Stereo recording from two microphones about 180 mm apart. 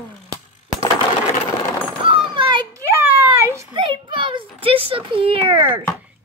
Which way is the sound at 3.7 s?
25° right (ahead or behind).